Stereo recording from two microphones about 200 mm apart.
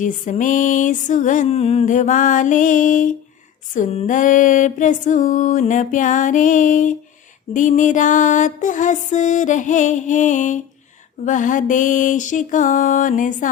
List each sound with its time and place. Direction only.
0.0 s mantra: 40° left (ahead or behind)